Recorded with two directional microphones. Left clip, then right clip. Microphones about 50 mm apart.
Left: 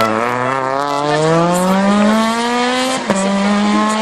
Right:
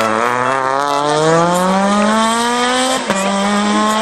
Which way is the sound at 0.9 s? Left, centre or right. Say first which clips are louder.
Right 1 dB; centre.